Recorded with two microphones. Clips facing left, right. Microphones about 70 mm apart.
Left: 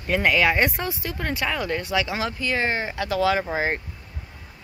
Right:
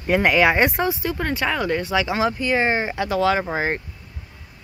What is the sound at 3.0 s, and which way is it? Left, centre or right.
Speech, centre.